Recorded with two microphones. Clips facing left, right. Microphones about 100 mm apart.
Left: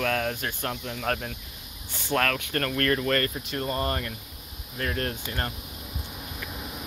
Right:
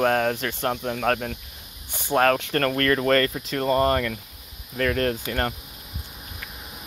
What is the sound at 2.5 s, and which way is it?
Speech, 50° right (ahead or behind).